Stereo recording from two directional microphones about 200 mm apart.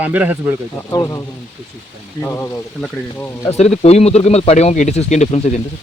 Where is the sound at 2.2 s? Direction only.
15° left (ahead or behind).